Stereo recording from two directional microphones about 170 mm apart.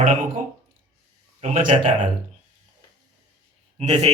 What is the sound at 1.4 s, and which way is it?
Speech, 45° right (ahead or behind).